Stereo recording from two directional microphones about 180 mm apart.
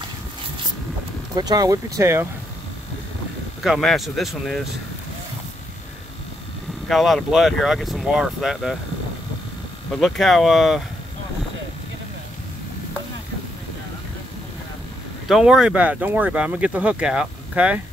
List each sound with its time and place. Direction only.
1.3 s speech: 20° right (ahead or behind)
3.6 s speech: centre (ahead or behind)
6.9 s speech: centre (ahead or behind)
9.9 s speech: centre (ahead or behind)
15.2 s speech: centre (ahead or behind)